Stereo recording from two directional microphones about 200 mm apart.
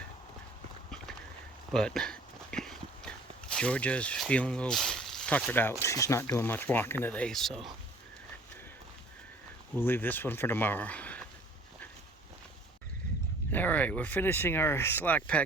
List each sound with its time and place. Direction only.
1.7 s a sound: centre (ahead or behind)
5.8 s speech: 15° left (ahead or behind)
9.7 s speech: 10° left (ahead or behind)
13.5 s speech: 10° left (ahead or behind)